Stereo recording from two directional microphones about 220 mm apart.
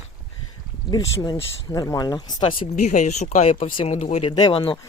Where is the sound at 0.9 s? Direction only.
15° left (ahead or behind).